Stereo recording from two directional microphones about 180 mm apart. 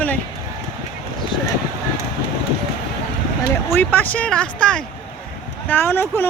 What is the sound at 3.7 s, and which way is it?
Speech, 10° left (ahead or behind).